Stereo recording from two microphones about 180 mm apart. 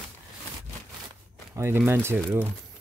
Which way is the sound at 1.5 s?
15° right (ahead or behind).